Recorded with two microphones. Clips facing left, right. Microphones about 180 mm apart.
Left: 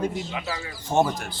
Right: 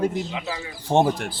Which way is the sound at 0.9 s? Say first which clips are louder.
Right 3 dB; 30° right (ahead or behind).